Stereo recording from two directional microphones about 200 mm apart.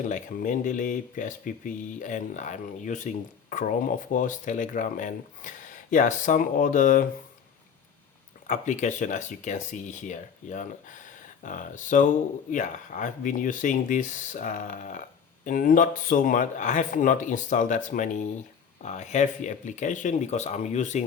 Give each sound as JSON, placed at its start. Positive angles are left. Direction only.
{"t": 0.1, "sound": "speech", "side_deg": 40}
{"t": 8.4, "sound": "speech", "side_deg": 35}